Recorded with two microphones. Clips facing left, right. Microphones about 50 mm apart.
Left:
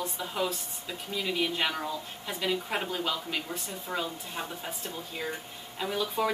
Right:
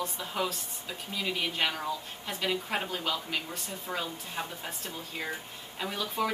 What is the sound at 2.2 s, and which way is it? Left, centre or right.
Speech, centre.